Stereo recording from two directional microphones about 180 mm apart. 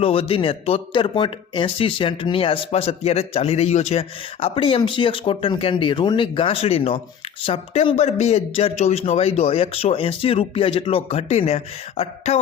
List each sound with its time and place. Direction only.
0.0 s speech: 30° left (ahead or behind)